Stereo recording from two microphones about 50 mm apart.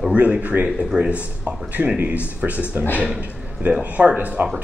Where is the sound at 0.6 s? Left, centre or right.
Centre.